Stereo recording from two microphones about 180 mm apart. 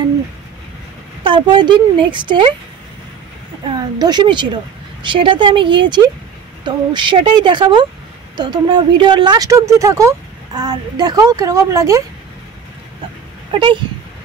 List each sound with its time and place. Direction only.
1.2 s speech: 25° right (ahead or behind)
4.0 s speech: 25° right (ahead or behind)
13.5 s speech: 25° right (ahead or behind)